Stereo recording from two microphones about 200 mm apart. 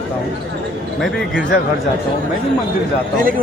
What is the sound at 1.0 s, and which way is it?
Speech, centre (ahead or behind).